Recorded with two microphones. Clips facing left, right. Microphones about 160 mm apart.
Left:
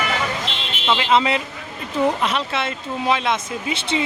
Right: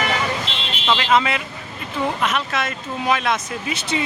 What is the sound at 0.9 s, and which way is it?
Speech, 20° left (ahead or behind).